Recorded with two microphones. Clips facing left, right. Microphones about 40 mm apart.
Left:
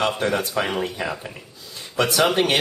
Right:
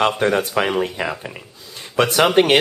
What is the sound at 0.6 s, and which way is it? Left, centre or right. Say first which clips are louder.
Speech: right 4 dB; right.